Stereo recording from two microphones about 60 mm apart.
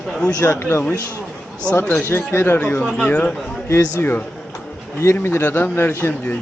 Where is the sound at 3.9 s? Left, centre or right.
Left.